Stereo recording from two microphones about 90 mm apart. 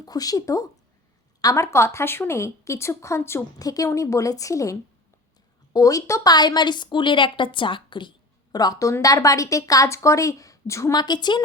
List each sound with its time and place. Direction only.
0.0 s speech: 45° left (ahead or behind); by 3.4 s 30° left (ahead or behind)
3.6 s speech: 40° left (ahead or behind)
6.2 s a woman's voice: 50° left (ahead or behind)
8.5 s speech: 45° left (ahead or behind)
10.9 s a woman's voice: 55° left (ahead or behind)